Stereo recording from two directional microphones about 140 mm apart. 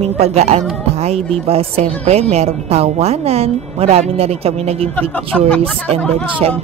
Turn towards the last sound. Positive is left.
turn(degrees=-45)  # may be behind; listen again after turning